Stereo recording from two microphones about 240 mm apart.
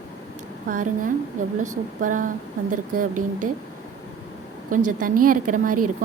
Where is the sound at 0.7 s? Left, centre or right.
Right.